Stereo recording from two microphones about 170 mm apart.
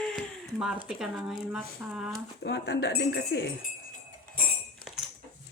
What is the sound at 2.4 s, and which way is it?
Speech, 85° left.